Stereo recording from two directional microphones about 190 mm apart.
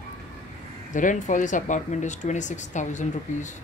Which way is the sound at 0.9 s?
40° left (ahead or behind).